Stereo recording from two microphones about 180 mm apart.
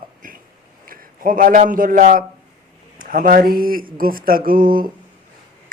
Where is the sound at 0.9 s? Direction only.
50° right (ahead or behind).